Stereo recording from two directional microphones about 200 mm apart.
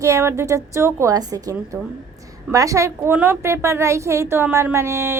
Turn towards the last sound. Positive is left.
turn(degrees=-15)  # may be behind; listen again after turning